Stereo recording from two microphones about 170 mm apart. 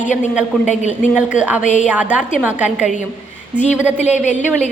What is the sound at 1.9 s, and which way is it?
A woman's voice, 10° right (ahead or behind).